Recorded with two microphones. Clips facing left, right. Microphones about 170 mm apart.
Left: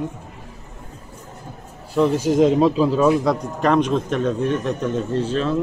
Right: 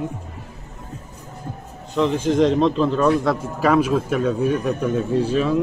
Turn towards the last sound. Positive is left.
turn(degrees=-10)  # may be behind; listen again after turning